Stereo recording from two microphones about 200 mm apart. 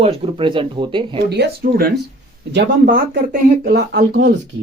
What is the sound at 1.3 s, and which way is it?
Speech, 50° right (ahead or behind).